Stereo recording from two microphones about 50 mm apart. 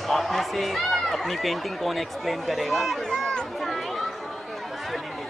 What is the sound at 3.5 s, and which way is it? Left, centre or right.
Children playing, centre.